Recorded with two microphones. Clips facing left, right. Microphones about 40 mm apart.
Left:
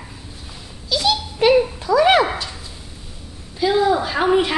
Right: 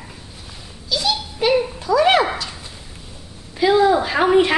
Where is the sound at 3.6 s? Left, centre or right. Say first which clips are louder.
Right 2 dB; centre.